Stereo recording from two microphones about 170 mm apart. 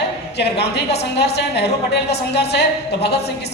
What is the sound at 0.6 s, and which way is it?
A woman's voice, 75° left (ahead or behind).